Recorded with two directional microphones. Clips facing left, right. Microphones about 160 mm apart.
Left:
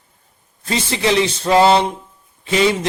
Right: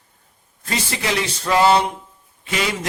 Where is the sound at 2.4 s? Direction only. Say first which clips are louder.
Left 8 dB; 30° left (ahead or behind).